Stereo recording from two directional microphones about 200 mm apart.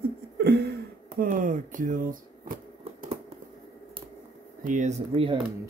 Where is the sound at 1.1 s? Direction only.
40° right (ahead or behind).